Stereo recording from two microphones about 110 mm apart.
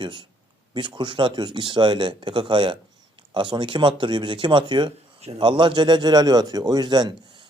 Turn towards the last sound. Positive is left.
turn(degrees=-45)  # may be behind; listen again after turning